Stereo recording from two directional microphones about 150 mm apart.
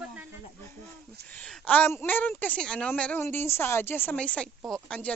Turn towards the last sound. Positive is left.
turn(degrees=5)  # may be behind; listen again after turning